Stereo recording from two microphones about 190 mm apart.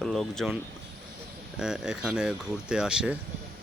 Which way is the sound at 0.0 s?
Centre (ahead or behind).